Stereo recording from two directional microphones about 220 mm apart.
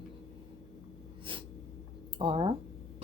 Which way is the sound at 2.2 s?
25° right (ahead or behind).